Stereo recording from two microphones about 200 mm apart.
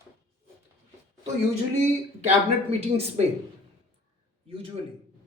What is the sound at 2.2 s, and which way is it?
Speech, 30° right (ahead or behind).